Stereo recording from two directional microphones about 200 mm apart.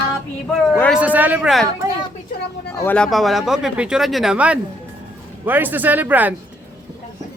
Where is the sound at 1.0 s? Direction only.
10° right (ahead or behind).